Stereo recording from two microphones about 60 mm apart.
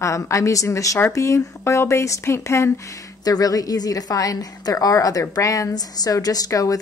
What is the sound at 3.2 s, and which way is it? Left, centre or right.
A woman's voice, left.